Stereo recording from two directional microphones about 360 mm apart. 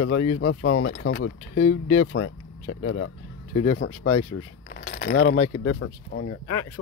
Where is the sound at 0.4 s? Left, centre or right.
Left.